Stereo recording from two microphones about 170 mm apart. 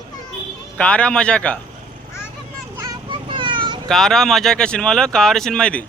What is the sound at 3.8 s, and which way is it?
Speech, centre (ahead or behind).